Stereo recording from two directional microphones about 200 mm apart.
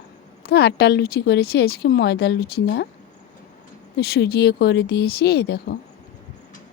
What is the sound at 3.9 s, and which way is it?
Speech, 55° left (ahead or behind).